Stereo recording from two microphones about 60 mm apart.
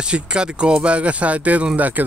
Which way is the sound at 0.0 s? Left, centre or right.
Centre.